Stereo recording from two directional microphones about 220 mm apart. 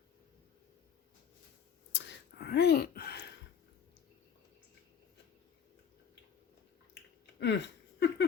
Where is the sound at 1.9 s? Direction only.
50° left (ahead or behind).